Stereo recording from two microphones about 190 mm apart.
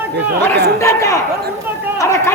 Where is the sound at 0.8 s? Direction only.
15° left (ahead or behind).